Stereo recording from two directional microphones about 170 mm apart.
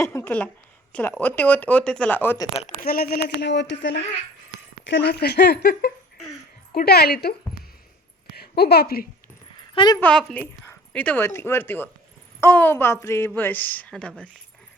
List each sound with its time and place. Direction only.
0.0 s a woman's voice: 15° left (ahead or behind)
2.8 s speech: 60° left (ahead or behind)
8.4 s a woman's voice: 70° left (ahead or behind)
9.7 s a woman's voice: 25° left (ahead or behind)
10.0 s a woman's voice: 5° left (ahead or behind)